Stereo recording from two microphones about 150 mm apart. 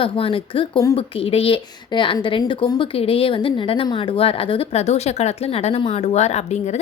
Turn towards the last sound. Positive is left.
turn(degrees=50)  # may be behind; listen again after turning